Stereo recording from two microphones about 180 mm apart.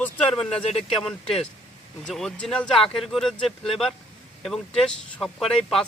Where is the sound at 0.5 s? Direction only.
35° left (ahead or behind).